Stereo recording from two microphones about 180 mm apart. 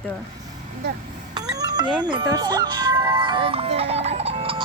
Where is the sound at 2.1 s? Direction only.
25° right (ahead or behind).